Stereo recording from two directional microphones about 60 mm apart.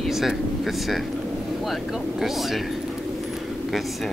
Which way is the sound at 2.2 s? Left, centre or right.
Centre.